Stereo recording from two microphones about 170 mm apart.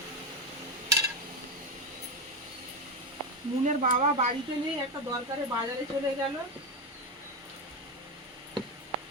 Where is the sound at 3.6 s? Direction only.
45° right (ahead or behind).